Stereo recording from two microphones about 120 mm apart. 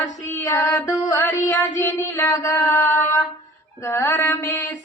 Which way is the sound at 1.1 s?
15° left (ahead or behind).